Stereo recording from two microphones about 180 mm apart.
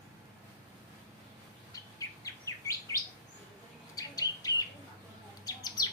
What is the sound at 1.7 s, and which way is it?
Chirp, 20° left (ahead or behind).